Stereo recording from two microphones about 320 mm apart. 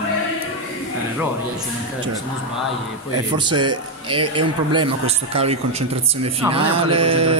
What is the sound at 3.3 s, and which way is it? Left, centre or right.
A man's voice, centre.